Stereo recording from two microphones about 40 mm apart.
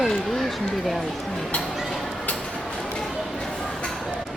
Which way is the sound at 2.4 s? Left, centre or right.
Centre.